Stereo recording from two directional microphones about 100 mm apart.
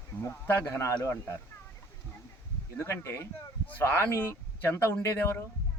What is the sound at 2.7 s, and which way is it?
Speech, 25° left (ahead or behind).